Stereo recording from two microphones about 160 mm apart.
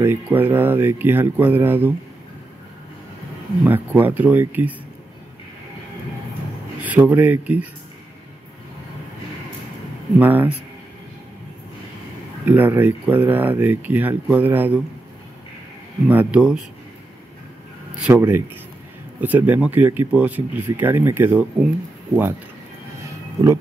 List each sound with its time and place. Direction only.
0.0 s speech: 15° right (ahead or behind)
3.6 s speech: 10° right (ahead or behind)
6.8 s speech: 10° right (ahead or behind)
10.1 s speech: 10° right (ahead or behind)
12.4 s speech: 10° right (ahead or behind)
16.1 s speech: 10° right (ahead or behind)
18.1 s speech: 20° right (ahead or behind)
19.2 s speech: 10° right (ahead or behind)
23.0 s a sound: 20° right (ahead or behind)